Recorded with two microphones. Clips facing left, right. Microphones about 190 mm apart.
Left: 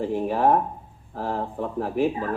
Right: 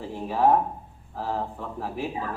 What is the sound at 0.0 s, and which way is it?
Speech, 55° left (ahead or behind).